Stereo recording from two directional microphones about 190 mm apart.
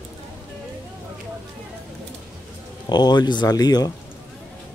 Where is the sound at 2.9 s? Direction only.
20° left (ahead or behind).